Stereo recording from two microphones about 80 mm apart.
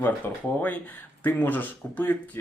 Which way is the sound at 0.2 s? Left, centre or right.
Left.